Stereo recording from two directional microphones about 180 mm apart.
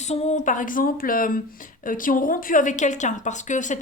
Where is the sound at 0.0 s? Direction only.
40° left (ahead or behind).